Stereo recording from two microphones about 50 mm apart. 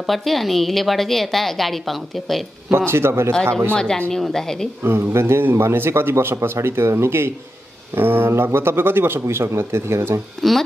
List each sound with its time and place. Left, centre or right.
0.0 s a woman's voice: centre
2.9 s a man's voice: right
3.7 s a woman's voice: centre
4.8 s a man's voice: right
7.9 s a man's voice: right
10.4 s a woman's voice: centre